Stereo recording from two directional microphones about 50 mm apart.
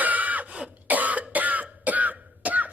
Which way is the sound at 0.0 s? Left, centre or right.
Right.